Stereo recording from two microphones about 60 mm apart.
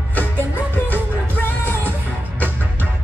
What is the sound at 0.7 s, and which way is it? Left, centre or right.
Music, left.